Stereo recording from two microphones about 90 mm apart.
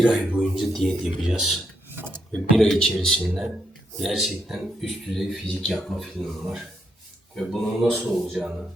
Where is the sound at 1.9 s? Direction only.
25° right (ahead or behind).